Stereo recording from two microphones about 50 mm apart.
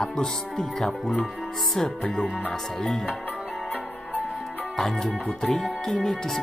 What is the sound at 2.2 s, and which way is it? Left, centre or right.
Speech, centre.